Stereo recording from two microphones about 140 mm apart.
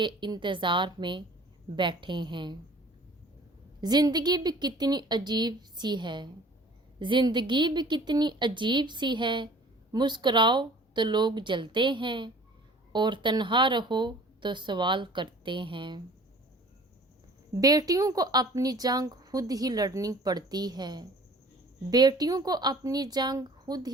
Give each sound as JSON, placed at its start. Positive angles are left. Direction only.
{"t": 0.0, "sound": "speech", "side_deg": -35}
{"t": 3.8, "sound": "speech", "side_deg": -30}
{"t": 17.6, "sound": "a woman's voice", "side_deg": -25}